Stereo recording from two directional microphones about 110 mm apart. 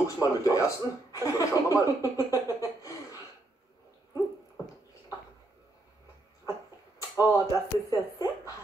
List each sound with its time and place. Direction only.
0.0 s speech: 30° left (ahead or behind)
7.2 s a woman's voice: 30° left (ahead or behind)